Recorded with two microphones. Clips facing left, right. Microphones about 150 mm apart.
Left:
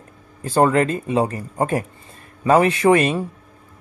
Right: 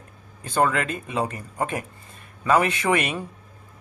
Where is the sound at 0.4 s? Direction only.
35° left (ahead or behind).